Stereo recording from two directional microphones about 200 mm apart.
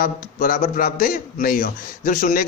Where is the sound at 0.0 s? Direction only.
45° left (ahead or behind).